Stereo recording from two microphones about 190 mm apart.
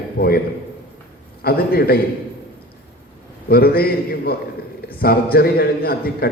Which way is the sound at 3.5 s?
55° left (ahead or behind).